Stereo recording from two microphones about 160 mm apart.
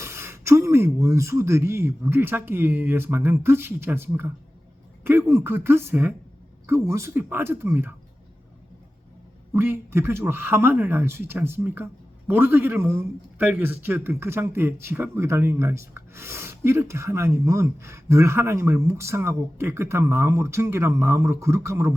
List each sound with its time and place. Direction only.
0.0 s speech: 15° right (ahead or behind)
9.5 s speech: 15° right (ahead or behind)